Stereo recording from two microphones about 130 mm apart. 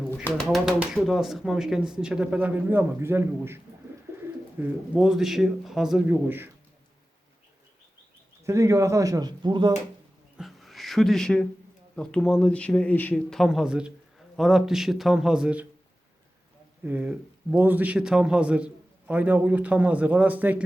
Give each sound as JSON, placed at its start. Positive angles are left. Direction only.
{"t": 0.4, "sound": "speech", "side_deg": 0}
{"t": 4.1, "sound": "bird", "side_deg": -20}
{"t": 4.6, "sound": "speech", "side_deg": -5}
{"t": 6.1, "sound": "a man's voice", "side_deg": -15}
{"t": 8.4, "sound": "speech", "side_deg": -25}
{"t": 10.3, "sound": "a sound", "side_deg": 0}
{"t": 11.9, "sound": "speech", "side_deg": 5}
{"t": 13.3, "sound": "speech", "side_deg": 0}
{"t": 16.8, "sound": "a man's voice", "side_deg": -10}